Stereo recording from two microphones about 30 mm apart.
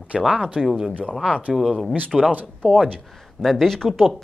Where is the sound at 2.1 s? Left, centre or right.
Centre.